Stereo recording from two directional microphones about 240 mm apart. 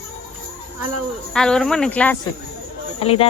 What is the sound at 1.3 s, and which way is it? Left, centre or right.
Speech, centre.